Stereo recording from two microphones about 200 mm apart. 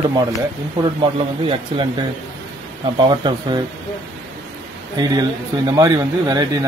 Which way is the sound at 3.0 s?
20° right (ahead or behind).